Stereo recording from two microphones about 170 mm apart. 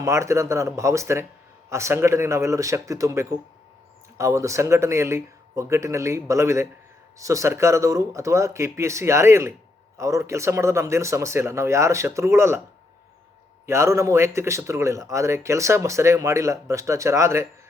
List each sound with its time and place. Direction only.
0.0 s speech: 15° right (ahead or behind)
13.7 s speech: 15° right (ahead or behind)